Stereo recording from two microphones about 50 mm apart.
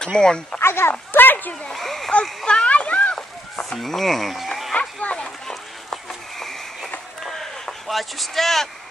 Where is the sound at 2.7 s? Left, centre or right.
Left.